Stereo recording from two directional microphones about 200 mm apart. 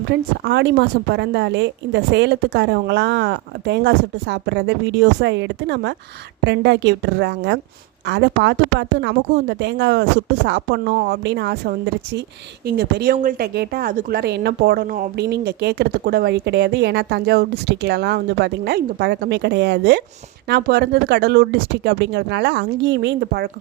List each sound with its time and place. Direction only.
0.1 s a woman's voice: 60° right (ahead or behind)